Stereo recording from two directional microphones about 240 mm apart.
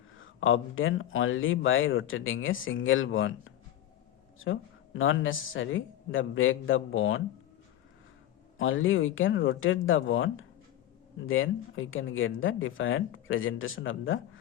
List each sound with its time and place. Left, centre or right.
0.2 s speech: left
4.9 s speech: left
8.5 s speech: left